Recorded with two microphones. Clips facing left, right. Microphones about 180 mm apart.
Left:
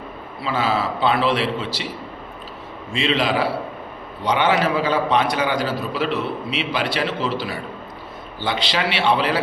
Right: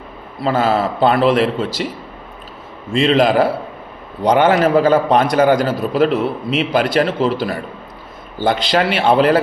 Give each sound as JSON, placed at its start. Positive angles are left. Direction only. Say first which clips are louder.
{"t": 0.4, "sound": "a man's voice", "louder": "right 6 dB", "side_deg": -45}
{"t": 2.9, "sound": "a man's voice", "louder": "right 8 dB", "side_deg": -45}